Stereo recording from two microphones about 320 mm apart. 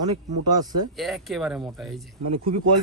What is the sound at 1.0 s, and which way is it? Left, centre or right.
Speech, centre.